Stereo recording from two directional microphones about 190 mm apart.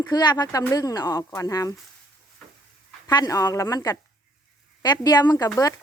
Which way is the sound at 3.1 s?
20° left (ahead or behind).